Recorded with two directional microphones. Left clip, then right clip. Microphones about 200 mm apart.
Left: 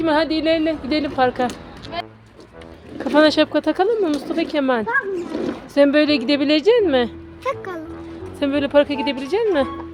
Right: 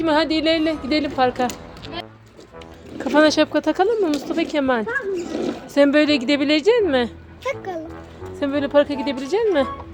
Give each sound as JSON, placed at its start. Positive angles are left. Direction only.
{"t": 0.0, "sound": "speech", "side_deg": 0}
{"t": 3.0, "sound": "speech", "side_deg": 0}
{"t": 7.4, "sound": "music", "side_deg": 25}
{"t": 8.4, "sound": "speech", "side_deg": 10}